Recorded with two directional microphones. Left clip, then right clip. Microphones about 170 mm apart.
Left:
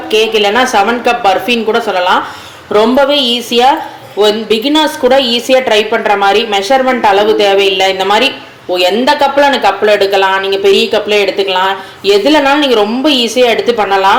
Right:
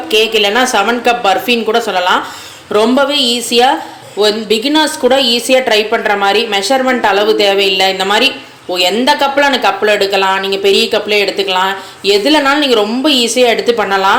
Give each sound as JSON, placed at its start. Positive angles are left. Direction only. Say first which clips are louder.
{"t": 0.1, "sound": "a woman's voice", "louder": "left 1 dB", "side_deg": -5}